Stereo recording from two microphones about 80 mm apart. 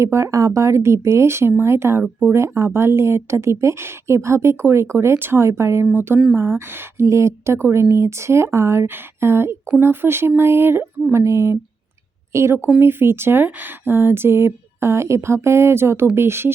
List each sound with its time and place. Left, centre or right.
0.0 s speech: right